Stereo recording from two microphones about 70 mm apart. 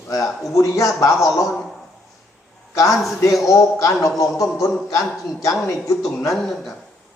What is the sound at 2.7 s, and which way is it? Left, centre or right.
A man's voice, left.